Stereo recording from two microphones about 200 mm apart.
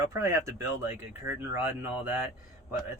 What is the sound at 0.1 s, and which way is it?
Speech, 15° right (ahead or behind).